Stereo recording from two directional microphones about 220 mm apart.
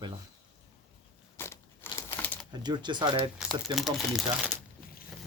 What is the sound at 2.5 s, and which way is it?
Speech, 20° right (ahead or behind).